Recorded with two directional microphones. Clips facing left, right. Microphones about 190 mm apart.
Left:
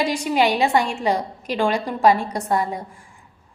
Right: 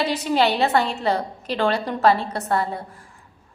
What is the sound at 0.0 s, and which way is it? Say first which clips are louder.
A woman's voice: left 1 dB; 10° left (ahead or behind).